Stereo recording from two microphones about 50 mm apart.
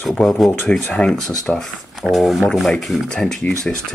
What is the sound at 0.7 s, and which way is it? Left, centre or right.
Speech, centre.